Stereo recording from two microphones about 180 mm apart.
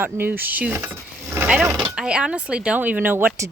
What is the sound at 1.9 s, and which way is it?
Speech, 5° right (ahead or behind).